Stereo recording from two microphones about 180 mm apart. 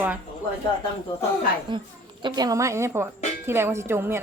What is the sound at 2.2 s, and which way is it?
A woman's voice, 25° right (ahead or behind).